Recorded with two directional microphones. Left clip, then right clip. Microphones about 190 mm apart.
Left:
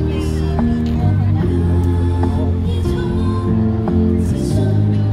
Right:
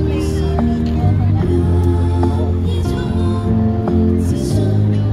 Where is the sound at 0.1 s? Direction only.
45° right (ahead or behind).